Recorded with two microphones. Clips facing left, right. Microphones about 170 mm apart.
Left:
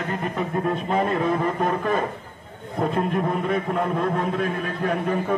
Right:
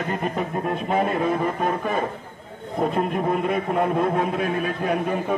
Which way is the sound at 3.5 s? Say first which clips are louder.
Right 2 dB; 10° right (ahead or behind).